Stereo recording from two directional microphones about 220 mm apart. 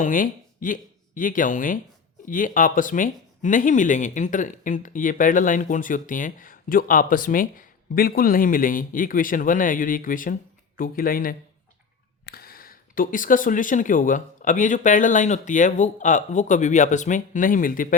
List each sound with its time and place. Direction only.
0.0 s speech: 35° left (ahead or behind)